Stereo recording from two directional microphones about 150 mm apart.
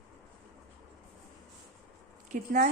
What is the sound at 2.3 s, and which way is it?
Speech, 55° right (ahead or behind).